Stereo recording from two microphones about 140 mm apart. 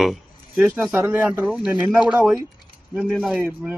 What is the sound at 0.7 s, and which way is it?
Speech, 10° right (ahead or behind).